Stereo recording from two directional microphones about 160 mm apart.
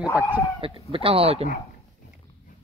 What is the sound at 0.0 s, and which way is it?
Speech, 10° right (ahead or behind).